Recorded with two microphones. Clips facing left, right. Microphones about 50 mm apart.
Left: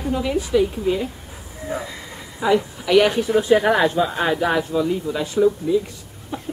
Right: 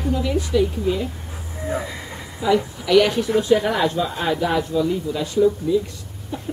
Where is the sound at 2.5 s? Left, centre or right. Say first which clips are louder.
Even; centre.